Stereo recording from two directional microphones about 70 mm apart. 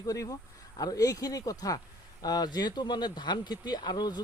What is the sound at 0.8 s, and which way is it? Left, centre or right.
Speech, left.